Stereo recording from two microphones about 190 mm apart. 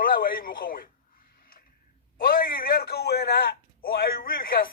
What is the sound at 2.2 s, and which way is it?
A man's voice, 50° left (ahead or behind).